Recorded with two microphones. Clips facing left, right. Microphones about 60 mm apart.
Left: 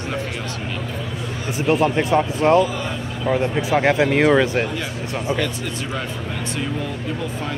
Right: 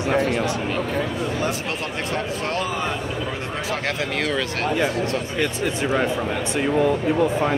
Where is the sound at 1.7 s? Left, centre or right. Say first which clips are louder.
Left 9 dB; left.